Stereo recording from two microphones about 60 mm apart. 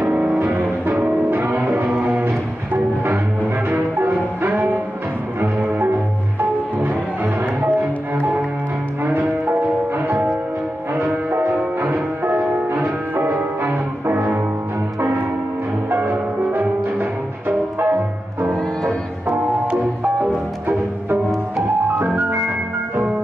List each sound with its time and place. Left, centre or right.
0.0 s music: right
1.6 s music: right
3.0 s music: right
9.0 s music: right
11.0 s music: right
15.0 s church bell: right
15.9 s music: right
16.8 s music: right
19.7 s music: centre